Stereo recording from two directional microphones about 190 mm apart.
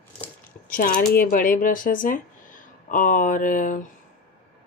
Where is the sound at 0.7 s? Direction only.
45° left (ahead or behind).